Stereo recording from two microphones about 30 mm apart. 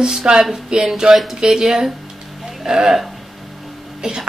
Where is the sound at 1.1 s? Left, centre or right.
Centre.